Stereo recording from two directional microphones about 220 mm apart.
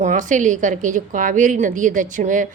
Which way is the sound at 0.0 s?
35° right (ahead or behind).